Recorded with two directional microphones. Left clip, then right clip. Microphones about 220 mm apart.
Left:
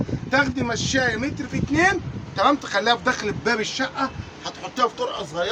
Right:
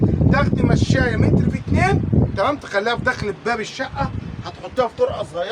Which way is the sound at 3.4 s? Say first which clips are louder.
Even; 10° right (ahead or behind).